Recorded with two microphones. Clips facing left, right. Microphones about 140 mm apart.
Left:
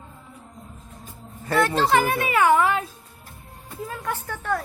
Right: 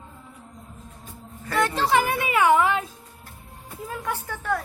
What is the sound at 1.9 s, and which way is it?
Speech, 15° right (ahead or behind).